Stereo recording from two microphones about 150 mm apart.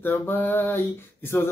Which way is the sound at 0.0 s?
15° left (ahead or behind).